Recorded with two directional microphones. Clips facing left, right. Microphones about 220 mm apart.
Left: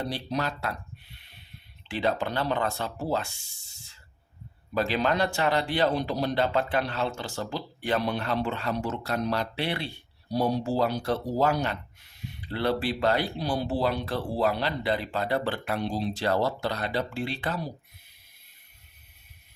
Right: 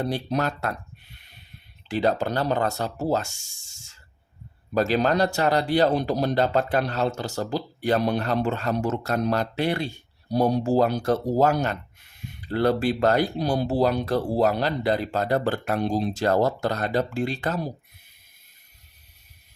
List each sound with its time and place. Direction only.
0.0 s speech: 50° right (ahead or behind)
1.9 s speech: 40° right (ahead or behind)